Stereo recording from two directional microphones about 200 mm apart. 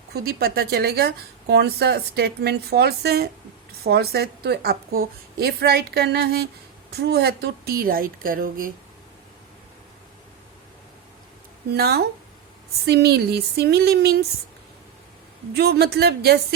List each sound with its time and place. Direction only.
0.1 s a woman's voice: 50° right (ahead or behind)
11.7 s a woman's voice: 50° right (ahead or behind)
15.5 s a woman's voice: 55° right (ahead or behind)